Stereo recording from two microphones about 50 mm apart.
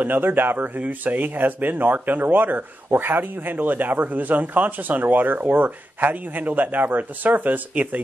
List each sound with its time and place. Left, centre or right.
0.0 s speech: right